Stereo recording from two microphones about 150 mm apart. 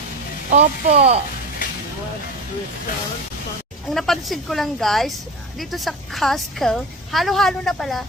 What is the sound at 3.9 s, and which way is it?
A woman's voice, centre (ahead or behind).